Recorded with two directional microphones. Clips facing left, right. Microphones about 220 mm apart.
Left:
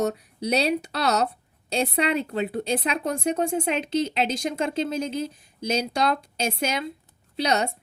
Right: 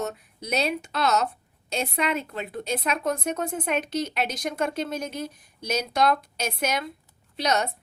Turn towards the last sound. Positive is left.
turn(degrees=30)  # may be behind; listen again after turning